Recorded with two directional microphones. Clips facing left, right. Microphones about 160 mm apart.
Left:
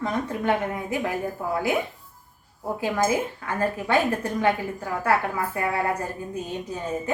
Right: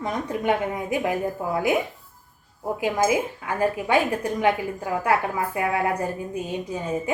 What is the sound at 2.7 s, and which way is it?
A woman's voice, 15° right (ahead or behind).